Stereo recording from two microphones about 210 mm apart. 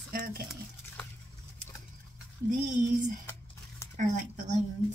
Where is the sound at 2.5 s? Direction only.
40° right (ahead or behind).